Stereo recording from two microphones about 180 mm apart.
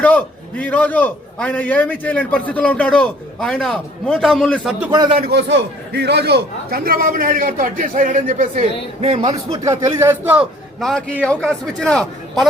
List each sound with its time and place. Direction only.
0.0 s a man's voice: 10° left (ahead or behind)
4.8 s a man's voice: 20° right (ahead or behind)
5.2 s a man's voice: 70° right (ahead or behind); by 8.6 s 45° right (ahead or behind)
9.0 s a man's voice: 35° right (ahead or behind)
9.6 s a man's voice: 15° right (ahead or behind)
10.8 s a man's voice: 5° left (ahead or behind)